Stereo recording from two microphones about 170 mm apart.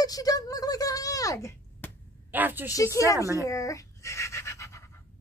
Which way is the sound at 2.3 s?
10° right (ahead or behind).